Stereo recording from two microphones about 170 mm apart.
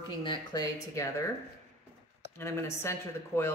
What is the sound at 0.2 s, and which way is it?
Speech, 25° left (ahead or behind).